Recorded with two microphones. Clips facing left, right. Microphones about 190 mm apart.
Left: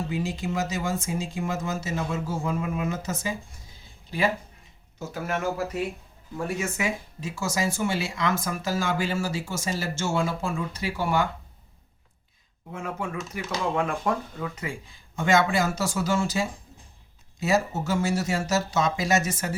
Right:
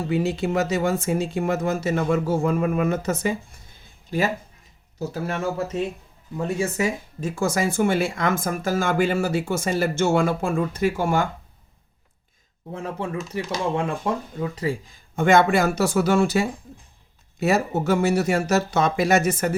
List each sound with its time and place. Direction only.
0.1 s speech: 65° right (ahead or behind)
4.9 s speech: 35° right (ahead or behind)
6.6 s speech: 40° right (ahead or behind)
12.7 s speech: 35° right (ahead or behind)
13.7 s speech: 25° right (ahead or behind)
15.1 s speech: 55° right (ahead or behind)